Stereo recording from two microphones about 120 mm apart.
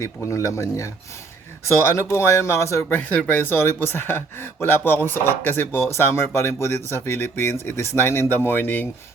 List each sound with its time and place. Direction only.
0.3 s speech: 25° left (ahead or behind)
3.0 s speech: 15° left (ahead or behind)